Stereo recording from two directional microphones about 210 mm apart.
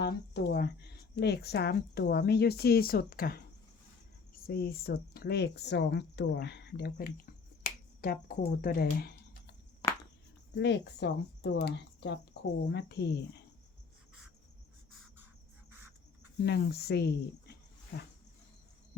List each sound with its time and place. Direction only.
0.0 s speech: 55° left (ahead or behind)
4.4 s speech: 45° left (ahead or behind)
7.6 s finger snapping: 45° left (ahead or behind)
9.8 s a sound: 25° left (ahead or behind)
10.5 s speech: 55° left (ahead or behind)
16.4 s speech: 50° left (ahead or behind)